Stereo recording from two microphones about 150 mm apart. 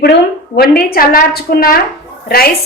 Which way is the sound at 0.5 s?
90° left.